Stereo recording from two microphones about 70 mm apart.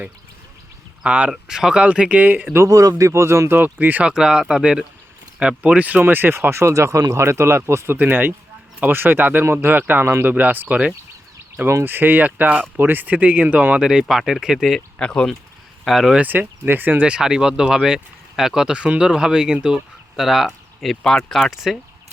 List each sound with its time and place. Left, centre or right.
1.0 s speech: centre
2.6 s speech: right
3.5 s speech: right
4.0 s speech: centre
6.0 s speech: right
7.9 s speech: right
13.8 s speech: centre
14.9 s speech: centre
15.8 s speech: centre
16.1 s speech: right; by 20.9 s centre
20.9 s speech: centre